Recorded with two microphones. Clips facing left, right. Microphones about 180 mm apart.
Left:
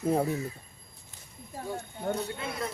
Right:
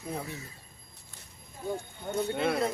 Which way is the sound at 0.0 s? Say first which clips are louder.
Left 10 dB; 45° left (ahead or behind).